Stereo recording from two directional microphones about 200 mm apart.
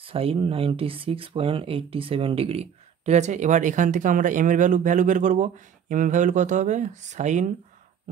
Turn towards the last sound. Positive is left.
turn(degrees=-35)  # may be behind; listen again after turning